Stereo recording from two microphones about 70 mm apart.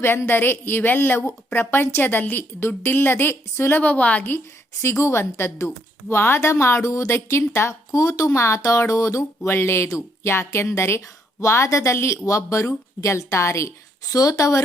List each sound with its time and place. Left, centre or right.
0.0 s a woman's voice: left
4.8 s a woman's voice: left
7.9 s a woman's voice: left
9.5 s a woman's voice: left